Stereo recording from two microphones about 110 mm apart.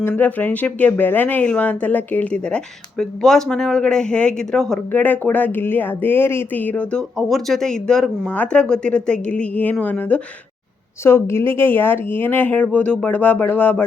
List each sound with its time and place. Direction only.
0.1 s speech: 15° left (ahead or behind)
4.9 s speech: 15° left (ahead or behind)
8.3 s speech: 10° left (ahead or behind)
11.0 s speech: 25° left (ahead or behind)